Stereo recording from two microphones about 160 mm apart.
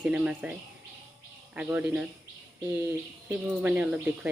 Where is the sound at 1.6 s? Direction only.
10° right (ahead or behind).